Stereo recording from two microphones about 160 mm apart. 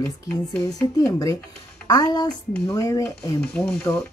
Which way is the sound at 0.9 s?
20° left (ahead or behind).